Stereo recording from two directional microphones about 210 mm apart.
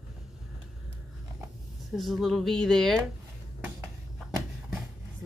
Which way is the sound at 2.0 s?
Centre (ahead or behind).